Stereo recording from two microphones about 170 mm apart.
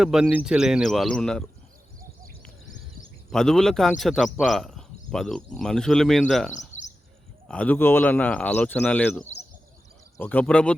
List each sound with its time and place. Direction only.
0.0 s speech: 5° right (ahead or behind)
3.3 s speech: 5° left (ahead or behind)
6.5 s bird: 45° left (ahead or behind)
7.4 s speech: 5° left (ahead or behind)